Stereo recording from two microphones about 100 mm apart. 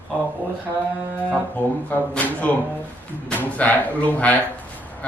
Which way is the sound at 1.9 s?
15° left (ahead or behind).